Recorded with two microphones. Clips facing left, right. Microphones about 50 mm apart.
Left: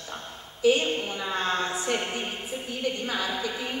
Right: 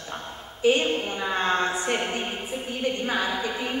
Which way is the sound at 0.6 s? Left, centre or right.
Right.